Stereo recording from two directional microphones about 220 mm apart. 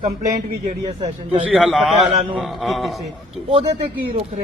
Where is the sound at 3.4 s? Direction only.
25° right (ahead or behind).